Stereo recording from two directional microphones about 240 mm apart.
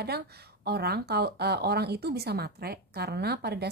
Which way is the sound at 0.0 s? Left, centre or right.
Right.